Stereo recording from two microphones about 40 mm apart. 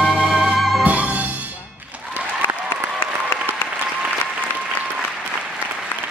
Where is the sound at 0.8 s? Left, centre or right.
Right.